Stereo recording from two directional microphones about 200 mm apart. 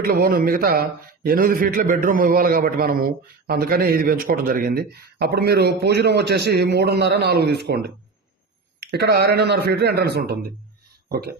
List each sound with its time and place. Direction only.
0.0 s a man's voice: 50° right (ahead or behind)